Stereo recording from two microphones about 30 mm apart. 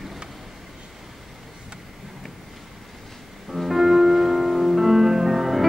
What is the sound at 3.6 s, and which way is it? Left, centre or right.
Music, centre.